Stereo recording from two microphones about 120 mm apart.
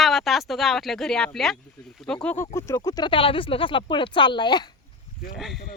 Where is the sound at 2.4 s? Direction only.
25° left (ahead or behind); by 4.7 s 40° left (ahead or behind).